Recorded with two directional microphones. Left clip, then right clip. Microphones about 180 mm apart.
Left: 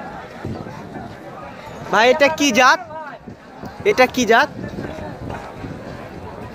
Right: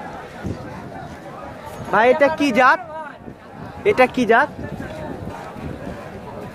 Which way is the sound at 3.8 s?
5° left (ahead or behind).